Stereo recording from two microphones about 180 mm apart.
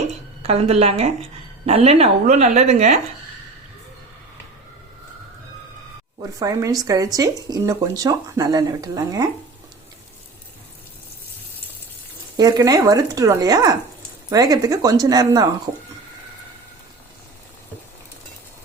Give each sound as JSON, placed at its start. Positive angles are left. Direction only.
{"t": 0.4, "sound": "a woman's voice", "side_deg": -35}
{"t": 6.1, "sound": "speech", "side_deg": -20}
{"t": 12.4, "sound": "speech", "side_deg": -20}